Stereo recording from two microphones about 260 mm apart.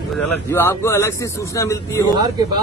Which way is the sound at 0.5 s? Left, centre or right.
Centre.